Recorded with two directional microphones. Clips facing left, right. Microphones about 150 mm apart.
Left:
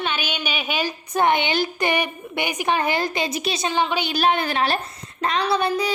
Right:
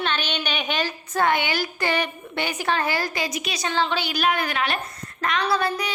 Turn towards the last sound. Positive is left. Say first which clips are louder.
# left 2 dB
turn(degrees=20)  # may be behind; listen again after turning